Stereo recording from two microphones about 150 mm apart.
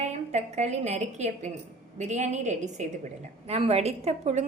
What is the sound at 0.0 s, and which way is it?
A woman's voice, 50° right (ahead or behind).